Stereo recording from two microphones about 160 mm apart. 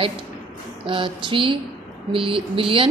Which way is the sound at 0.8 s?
35° right (ahead or behind).